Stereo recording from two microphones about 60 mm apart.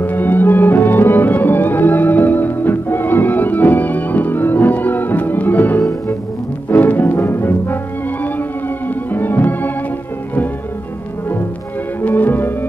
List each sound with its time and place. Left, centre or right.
0.0 s music: left
12.1 s music: left